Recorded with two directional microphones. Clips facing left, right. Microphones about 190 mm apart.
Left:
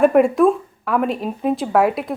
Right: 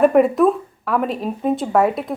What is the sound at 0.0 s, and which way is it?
Speech, centre (ahead or behind).